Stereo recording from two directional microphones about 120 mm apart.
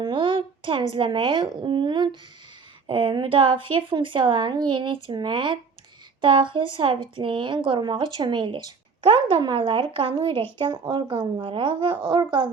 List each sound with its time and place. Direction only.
0.0 s a woman's voice: 45° right (ahead or behind)